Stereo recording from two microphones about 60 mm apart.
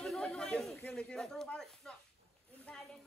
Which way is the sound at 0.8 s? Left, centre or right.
Centre.